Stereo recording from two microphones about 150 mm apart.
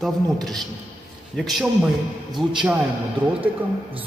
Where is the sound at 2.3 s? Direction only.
30° right (ahead or behind).